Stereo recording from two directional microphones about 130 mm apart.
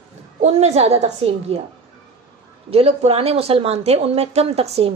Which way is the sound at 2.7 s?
50° right (ahead or behind).